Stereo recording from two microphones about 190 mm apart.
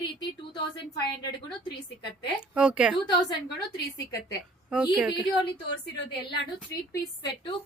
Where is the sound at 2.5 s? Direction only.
5° right (ahead or behind).